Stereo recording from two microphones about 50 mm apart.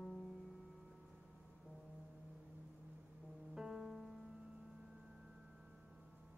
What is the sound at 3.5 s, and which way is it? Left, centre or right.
Music, centre.